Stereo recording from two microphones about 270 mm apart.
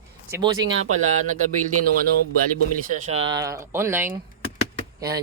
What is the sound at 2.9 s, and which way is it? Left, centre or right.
Speech, right.